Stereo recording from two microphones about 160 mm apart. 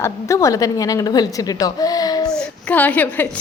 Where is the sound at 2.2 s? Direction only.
5° left (ahead or behind).